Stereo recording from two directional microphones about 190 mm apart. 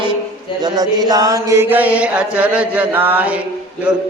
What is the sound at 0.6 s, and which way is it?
Mantra, 20° right (ahead or behind).